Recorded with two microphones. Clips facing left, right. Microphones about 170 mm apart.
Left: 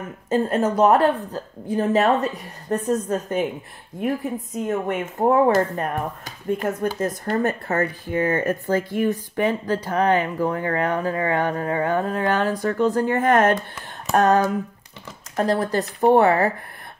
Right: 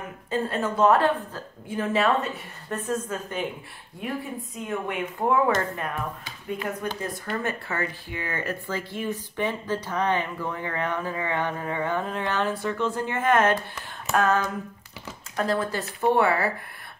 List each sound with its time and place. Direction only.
0.3 s a woman's voice: 40° left (ahead or behind)
4.6 s a woman's voice: 45° left (ahead or behind)